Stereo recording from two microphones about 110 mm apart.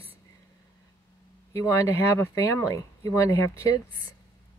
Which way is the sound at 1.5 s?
25° left (ahead or behind).